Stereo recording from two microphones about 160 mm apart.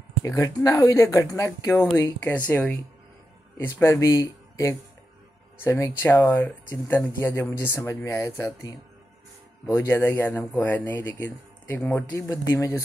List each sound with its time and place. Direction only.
0.2 s speech: 20° left (ahead or behind)